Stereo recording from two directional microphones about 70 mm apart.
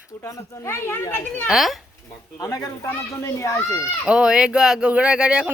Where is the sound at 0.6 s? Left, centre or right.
Left.